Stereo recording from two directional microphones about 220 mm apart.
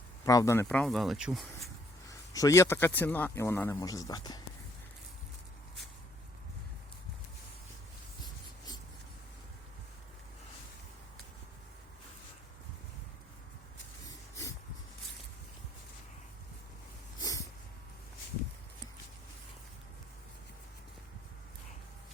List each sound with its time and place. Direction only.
0.3 s speech: 15° left (ahead or behind)
2.0 s speech: 15° left (ahead or behind)
8.2 s writing: 20° left (ahead or behind)
14.1 s a sound: 15° left (ahead or behind)
17.2 s snort: 15° left (ahead or behind)